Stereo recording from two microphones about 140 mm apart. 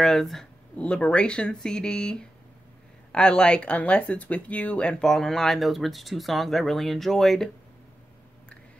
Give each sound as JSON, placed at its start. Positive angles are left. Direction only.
{"t": 0.0, "sound": "speech", "side_deg": 0}